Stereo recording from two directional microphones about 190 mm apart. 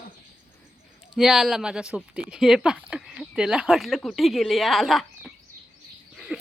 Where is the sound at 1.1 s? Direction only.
Centre (ahead or behind).